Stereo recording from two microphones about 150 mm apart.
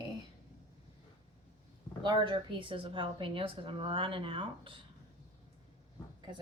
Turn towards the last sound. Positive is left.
turn(degrees=-35)  # may be behind; listen again after turning